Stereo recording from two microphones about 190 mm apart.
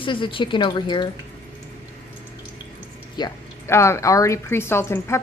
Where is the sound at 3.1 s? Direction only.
20° left (ahead or behind).